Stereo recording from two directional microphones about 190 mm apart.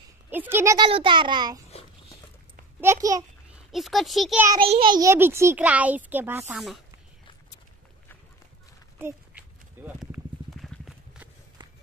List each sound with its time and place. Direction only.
0.3 s a child's voice: 10° right (ahead or behind)
0.8 s a child's voice: 25° right (ahead or behind)
2.8 s a child's voice: 15° right (ahead or behind)
3.7 s speech: centre (ahead or behind)
4.6 s a child's voice: 30° right (ahead or behind); by 6.6 s 10° right (ahead or behind)
8.9 s a sound: 10° right (ahead or behind)